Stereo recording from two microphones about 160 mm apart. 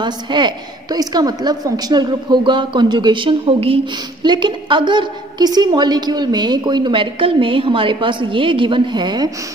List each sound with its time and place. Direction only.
0.0 s a woman's voice: 30° right (ahead or behind)